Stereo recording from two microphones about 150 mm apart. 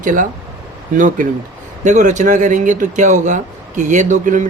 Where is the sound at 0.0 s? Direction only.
60° right (ahead or behind).